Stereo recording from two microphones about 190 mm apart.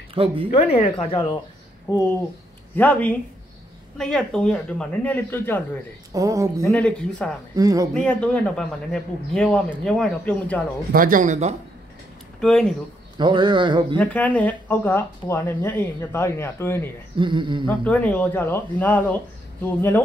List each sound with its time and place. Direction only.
0.1 s speech: 30° right (ahead or behind)
0.5 s speech: 30° left (ahead or behind)
1.9 s speech: 15° left (ahead or behind)
6.1 s speech: 15° right (ahead or behind)
6.6 s speech: 5° left (ahead or behind)
7.5 s a man's voice: 20° right (ahead or behind)
7.9 s speech: 5° left (ahead or behind)
10.9 s speech: 45° right (ahead or behind)
12.4 s speech: 5° left (ahead or behind)
13.2 s a man's voice: 25° right (ahead or behind)
13.9 s speech: 10° left (ahead or behind)
17.2 s a man's voice: 25° right (ahead or behind)
17.6 s speech: 10° left (ahead or behind)